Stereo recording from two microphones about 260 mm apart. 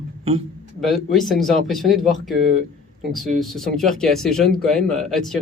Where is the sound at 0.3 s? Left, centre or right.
Right.